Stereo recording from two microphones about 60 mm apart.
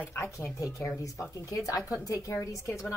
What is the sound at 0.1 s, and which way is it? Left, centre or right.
Speech, left.